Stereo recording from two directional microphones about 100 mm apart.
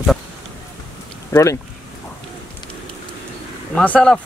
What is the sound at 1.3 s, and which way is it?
Speech, 30° left (ahead or behind).